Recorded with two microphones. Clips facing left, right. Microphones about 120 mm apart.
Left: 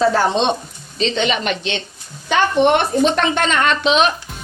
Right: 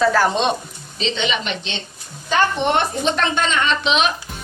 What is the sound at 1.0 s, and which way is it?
Speech, 45° left (ahead or behind).